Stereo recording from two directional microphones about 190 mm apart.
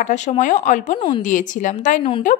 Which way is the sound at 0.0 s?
40° left (ahead or behind).